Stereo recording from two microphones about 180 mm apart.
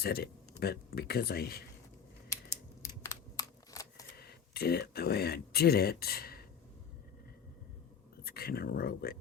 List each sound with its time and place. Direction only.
0.0 s speech: 60° left (ahead or behind)
3.0 s a sound: 20° left (ahead or behind)
4.2 s speech: 60° left (ahead or behind)
8.2 s speech: 60° left (ahead or behind)